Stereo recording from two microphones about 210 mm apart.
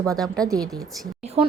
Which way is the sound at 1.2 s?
30° right (ahead or behind).